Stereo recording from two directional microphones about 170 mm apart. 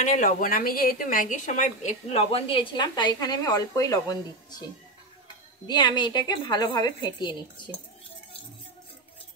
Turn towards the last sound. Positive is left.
turn(degrees=25)  # may be behind; listen again after turning